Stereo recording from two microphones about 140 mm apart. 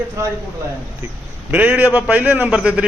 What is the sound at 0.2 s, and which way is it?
Speech, 20° right (ahead or behind).